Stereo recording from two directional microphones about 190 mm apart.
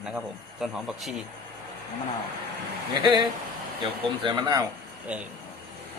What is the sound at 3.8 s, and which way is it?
Speech, 25° right (ahead or behind).